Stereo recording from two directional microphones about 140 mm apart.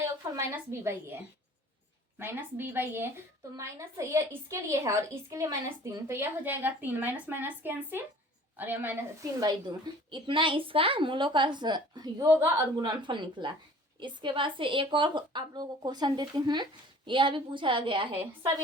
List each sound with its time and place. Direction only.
0.0 s a woman's voice: 20° right (ahead or behind)
9.4 s a woman's voice: 30° right (ahead or behind)